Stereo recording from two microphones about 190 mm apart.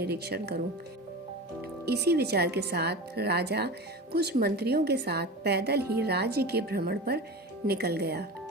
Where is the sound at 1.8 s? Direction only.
60° right (ahead or behind).